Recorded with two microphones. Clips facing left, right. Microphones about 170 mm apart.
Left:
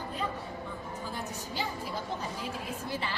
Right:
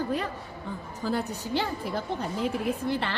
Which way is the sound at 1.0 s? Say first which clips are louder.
Right 13 dB; 70° right (ahead or behind).